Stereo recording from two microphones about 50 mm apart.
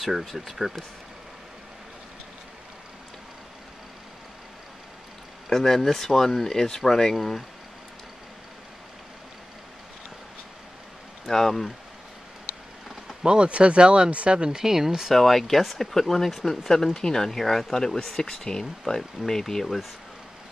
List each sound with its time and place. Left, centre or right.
0.0 s speech: centre
5.5 s speech: centre
11.2 s speech: centre
13.2 s speech: centre
15.1 s speech: centre